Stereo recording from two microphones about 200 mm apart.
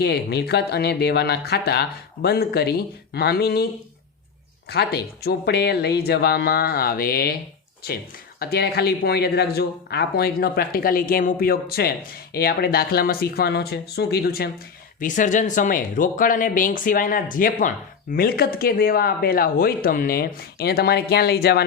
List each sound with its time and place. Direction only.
0.0 s speech: 55° left (ahead or behind)
4.7 s speech: 55° left (ahead or behind)
8.4 s speech: 50° left (ahead or behind)
15.0 s speech: 40° left (ahead or behind)